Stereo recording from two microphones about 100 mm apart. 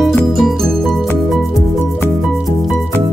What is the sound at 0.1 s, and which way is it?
Music, centre (ahead or behind).